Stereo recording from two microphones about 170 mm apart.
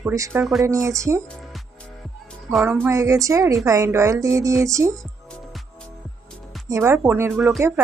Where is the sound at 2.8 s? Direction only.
20° right (ahead or behind).